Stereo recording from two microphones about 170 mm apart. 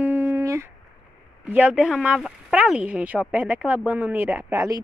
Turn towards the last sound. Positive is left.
turn(degrees=-15)  # may be behind; listen again after turning